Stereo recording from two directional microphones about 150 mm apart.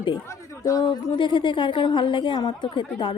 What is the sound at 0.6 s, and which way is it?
A woman's voice, 20° left (ahead or behind).